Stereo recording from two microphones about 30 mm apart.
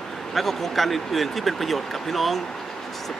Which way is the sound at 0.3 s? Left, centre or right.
Centre.